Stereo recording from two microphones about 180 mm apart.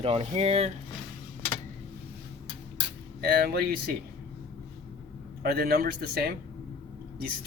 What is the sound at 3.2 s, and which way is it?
Speech, 60° right (ahead or behind).